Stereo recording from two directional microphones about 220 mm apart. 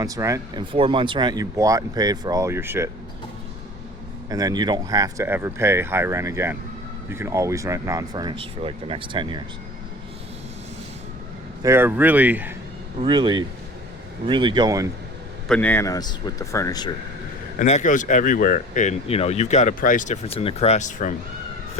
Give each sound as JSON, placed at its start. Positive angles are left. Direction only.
{"t": 0.0, "sound": "speech", "side_deg": -15}
{"t": 4.3, "sound": "speech", "side_deg": -15}
{"t": 11.6, "sound": "speech", "side_deg": -10}
{"t": 13.0, "sound": "speech", "side_deg": -20}
{"t": 15.4, "sound": "a man's voice", "side_deg": 5}
{"t": 17.6, "sound": "speech", "side_deg": 35}